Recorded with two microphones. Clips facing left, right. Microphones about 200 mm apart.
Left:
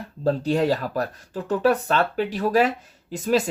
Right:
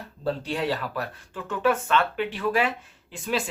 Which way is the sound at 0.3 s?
40° left (ahead or behind).